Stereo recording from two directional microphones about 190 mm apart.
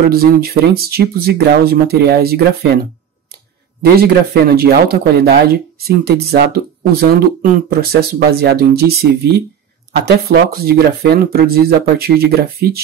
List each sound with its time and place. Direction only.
0.1 s speech: 50° right (ahead or behind)
3.8 s speech: 55° right (ahead or behind)